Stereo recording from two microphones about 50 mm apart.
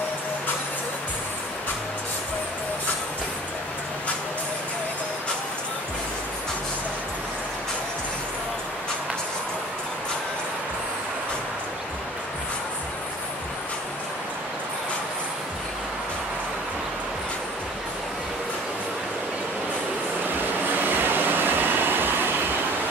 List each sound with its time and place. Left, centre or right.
21.0 s vehicle: right